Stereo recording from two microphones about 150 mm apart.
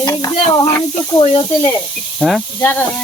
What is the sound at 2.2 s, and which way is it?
Speech, centre (ahead or behind).